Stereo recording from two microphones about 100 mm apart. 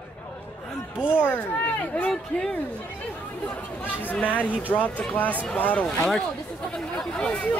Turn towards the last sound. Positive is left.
turn(degrees=10)  # may be behind; listen again after turning